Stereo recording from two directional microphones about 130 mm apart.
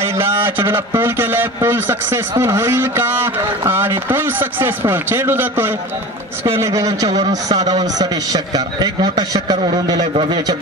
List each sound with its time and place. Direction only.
0.0 s a man's voice: 20° right (ahead or behind); by 10.5 s 35° right (ahead or behind)